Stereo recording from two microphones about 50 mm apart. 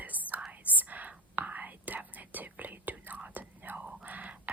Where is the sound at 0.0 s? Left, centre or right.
Right.